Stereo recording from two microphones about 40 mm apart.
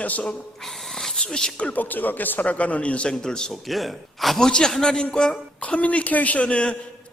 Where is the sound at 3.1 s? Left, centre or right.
Centre.